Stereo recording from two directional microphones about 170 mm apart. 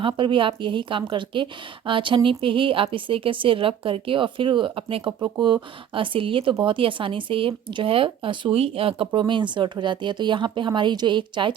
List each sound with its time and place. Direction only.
0.0 s a woman's voice: 30° right (ahead or behind)